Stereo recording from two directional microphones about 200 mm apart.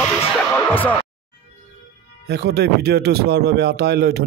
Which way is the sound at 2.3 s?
55° right (ahead or behind).